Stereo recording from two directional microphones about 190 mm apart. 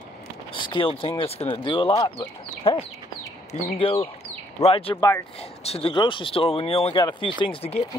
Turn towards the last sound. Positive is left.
turn(degrees=30)  # may be behind; listen again after turning